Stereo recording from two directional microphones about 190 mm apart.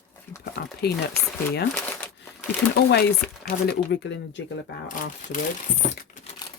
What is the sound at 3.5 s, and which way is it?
Speech, 65° left (ahead or behind).